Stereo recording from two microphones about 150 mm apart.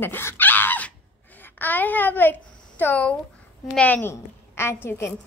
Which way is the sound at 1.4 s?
10° left (ahead or behind).